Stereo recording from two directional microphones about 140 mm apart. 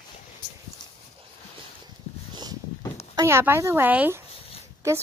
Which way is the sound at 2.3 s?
30° right (ahead or behind).